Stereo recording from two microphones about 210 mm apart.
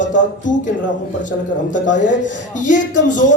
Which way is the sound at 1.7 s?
35° left (ahead or behind).